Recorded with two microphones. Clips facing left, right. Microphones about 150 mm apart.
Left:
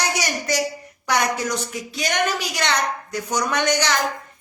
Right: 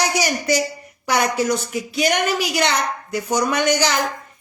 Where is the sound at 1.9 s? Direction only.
10° right (ahead or behind).